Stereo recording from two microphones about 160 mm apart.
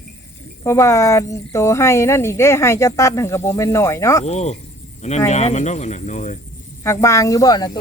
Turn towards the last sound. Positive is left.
turn(degrees=25)  # may be behind; listen again after turning